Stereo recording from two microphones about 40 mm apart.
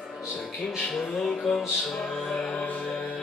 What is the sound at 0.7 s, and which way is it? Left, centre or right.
Music, centre.